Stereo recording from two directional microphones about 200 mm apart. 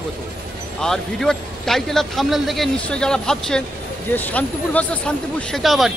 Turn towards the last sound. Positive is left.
turn(degrees=0)  # may be behind; listen again after turning